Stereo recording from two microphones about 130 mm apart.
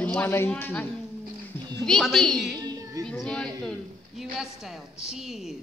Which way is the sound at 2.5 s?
30° right (ahead or behind).